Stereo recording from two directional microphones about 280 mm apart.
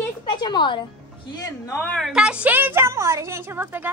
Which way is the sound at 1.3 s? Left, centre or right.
Centre.